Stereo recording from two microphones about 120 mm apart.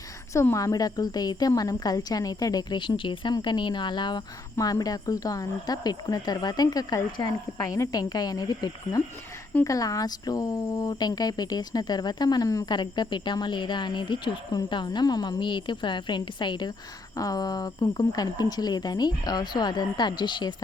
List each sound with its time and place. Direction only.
0.3 s speech: 25° left (ahead or behind)
12.7 s speech: 40° left (ahead or behind)